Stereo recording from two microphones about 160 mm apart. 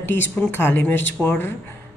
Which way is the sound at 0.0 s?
15° left (ahead or behind).